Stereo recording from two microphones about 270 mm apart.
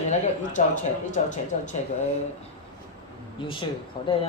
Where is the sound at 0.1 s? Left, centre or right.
Left.